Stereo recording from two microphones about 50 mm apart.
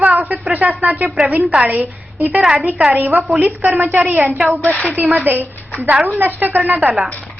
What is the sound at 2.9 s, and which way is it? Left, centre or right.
A woman's voice, right.